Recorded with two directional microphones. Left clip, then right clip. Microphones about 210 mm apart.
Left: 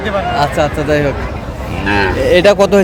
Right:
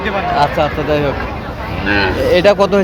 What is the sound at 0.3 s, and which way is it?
Speech, 5° left (ahead or behind).